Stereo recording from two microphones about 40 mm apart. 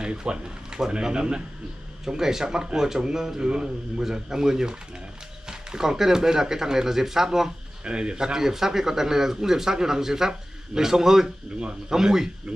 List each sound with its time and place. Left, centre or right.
0.0 s speech: right
7.8 s speech: right